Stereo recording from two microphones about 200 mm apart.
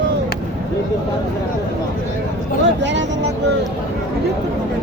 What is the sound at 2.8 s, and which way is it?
Speech, 65° right (ahead or behind).